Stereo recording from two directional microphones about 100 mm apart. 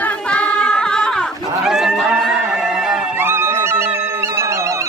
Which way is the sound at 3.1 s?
25° right (ahead or behind).